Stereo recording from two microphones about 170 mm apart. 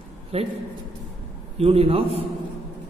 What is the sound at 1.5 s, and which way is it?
Speech, 35° right (ahead or behind).